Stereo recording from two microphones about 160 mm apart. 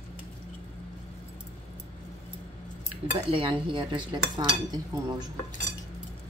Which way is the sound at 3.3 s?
35° right (ahead or behind).